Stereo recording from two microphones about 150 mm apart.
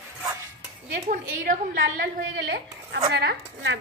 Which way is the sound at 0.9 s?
60° right (ahead or behind).